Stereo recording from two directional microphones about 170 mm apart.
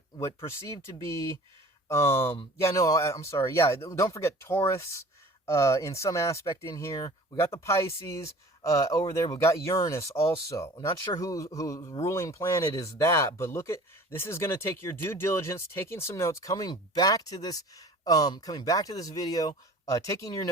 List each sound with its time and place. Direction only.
0.4 s speech: 15° left (ahead or behind)